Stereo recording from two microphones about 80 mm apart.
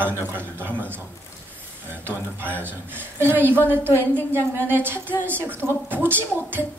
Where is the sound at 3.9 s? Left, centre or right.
Left.